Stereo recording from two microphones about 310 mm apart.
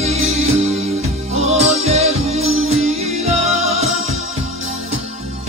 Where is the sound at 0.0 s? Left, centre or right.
Centre.